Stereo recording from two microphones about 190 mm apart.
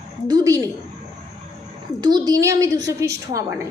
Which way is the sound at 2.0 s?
20° right (ahead or behind).